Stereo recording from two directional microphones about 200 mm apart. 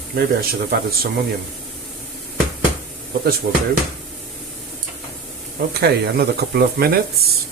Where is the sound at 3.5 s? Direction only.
60° right (ahead or behind).